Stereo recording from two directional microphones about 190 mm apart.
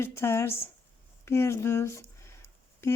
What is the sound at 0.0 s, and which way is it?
Speech, 15° left (ahead or behind).